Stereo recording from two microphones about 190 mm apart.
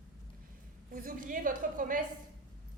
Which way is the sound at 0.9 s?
45° right (ahead or behind).